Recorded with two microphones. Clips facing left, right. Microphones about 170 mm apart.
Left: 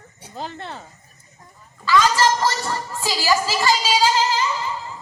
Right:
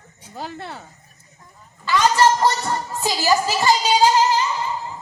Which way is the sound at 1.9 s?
20° right (ahead or behind).